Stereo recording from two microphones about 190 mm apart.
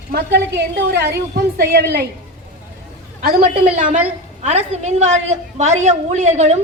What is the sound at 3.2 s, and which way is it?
A woman's voice, 50° right (ahead or behind).